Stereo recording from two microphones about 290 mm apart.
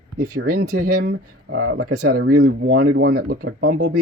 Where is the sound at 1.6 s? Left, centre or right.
Right.